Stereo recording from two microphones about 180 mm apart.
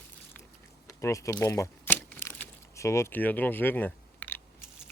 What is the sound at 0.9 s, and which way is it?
Speech, 20° left (ahead or behind).